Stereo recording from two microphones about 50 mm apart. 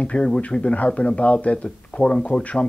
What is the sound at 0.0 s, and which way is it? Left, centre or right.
Speech, left.